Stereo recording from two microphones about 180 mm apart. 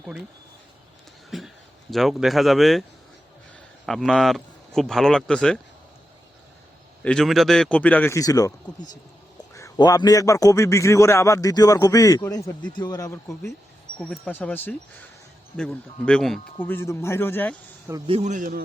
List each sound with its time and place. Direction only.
1.3 s a man's voice: centre (ahead or behind)
3.8 s a man's voice: centre (ahead or behind)
7.0 s a man's voice: 5° left (ahead or behind)
14.0 s a man's voice: 5° left (ahead or behind)
18.0 s a man's voice: 35° right (ahead or behind)